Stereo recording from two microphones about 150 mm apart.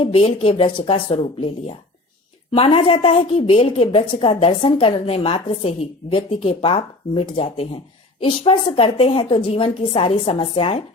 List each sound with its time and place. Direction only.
0.0 s a woman's voice: 40° left (ahead or behind)